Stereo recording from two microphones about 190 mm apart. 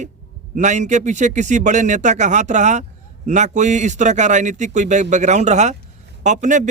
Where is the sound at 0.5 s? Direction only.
40° right (ahead or behind).